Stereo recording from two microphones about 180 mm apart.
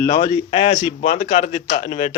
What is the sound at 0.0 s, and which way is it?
Speech, 20° left (ahead or behind).